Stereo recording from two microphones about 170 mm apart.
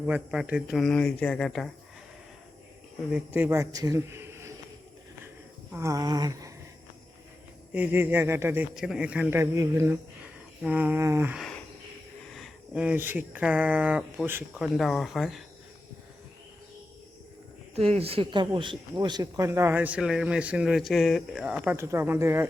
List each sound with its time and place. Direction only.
0.0 s speech: 5° right (ahead or behind)
3.1 s a man's voice: 10° right (ahead or behind)
5.7 s a sound: 20° right (ahead or behind)
7.7 s speech: 10° right (ahead or behind)
11.3 s a sound: centre (ahead or behind)
12.3 s speech: centre (ahead or behind)
17.7 s speech: 35° right (ahead or behind); by 22.4 s 15° right (ahead or behind)